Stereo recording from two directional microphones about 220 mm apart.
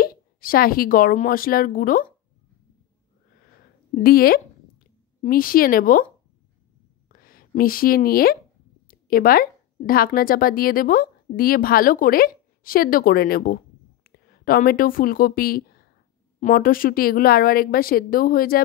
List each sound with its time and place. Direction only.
0.0 s speech: 40° left (ahead or behind)
3.9 s a woman's voice: 40° left (ahead or behind)
7.1 s a woman's voice: 40° left (ahead or behind)